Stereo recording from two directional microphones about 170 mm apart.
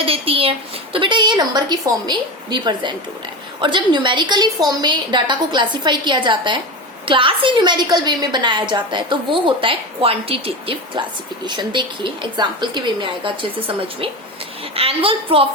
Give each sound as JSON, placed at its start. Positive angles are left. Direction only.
{"t": 0.0, "sound": "a woman's voice", "side_deg": -35}